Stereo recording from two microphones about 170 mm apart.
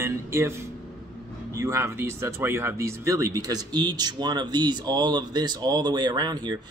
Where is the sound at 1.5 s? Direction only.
15° right (ahead or behind).